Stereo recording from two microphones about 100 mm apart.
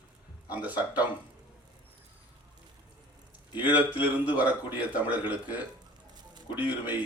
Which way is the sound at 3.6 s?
15° right (ahead or behind).